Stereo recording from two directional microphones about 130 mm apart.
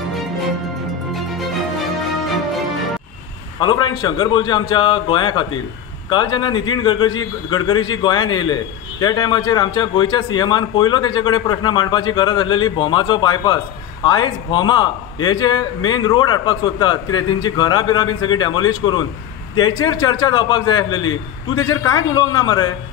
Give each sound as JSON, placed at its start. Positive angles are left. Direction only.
{"t": 3.5, "sound": "a man's voice", "side_deg": 35}